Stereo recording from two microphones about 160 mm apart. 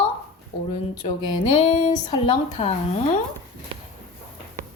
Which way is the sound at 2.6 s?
40° left (ahead or behind).